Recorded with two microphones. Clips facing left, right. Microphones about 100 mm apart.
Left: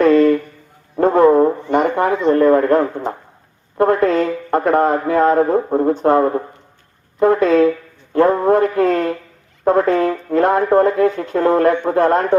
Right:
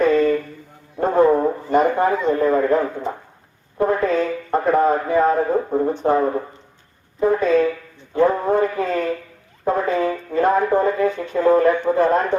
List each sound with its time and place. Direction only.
0.0 s a sound: 90° left
0.9 s speech: 90° left; by 3.1 s 75° left (ahead or behind)
3.8 s speech: 85° left